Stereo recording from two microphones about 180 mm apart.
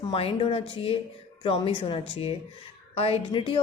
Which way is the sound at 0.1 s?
30° left (ahead or behind).